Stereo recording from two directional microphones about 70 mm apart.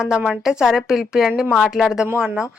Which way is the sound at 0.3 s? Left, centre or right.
Centre.